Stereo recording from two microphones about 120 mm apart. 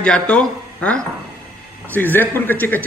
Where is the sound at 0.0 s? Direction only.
5° left (ahead or behind).